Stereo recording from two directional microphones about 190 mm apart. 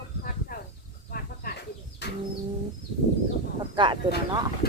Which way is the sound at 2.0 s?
60° left (ahead or behind).